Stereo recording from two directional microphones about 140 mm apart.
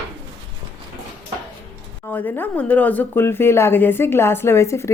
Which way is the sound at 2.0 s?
15° left (ahead or behind).